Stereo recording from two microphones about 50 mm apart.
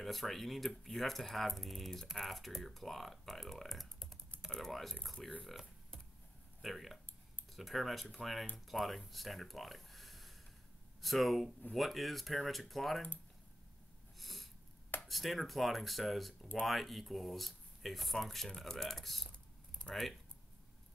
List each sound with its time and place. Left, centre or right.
0.0 s speech: centre
6.6 s speech: centre
14.1 s snort: centre
15.0 s speech: centre
19.9 s speech: left